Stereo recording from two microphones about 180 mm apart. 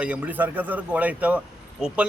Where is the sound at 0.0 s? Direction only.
10° right (ahead or behind).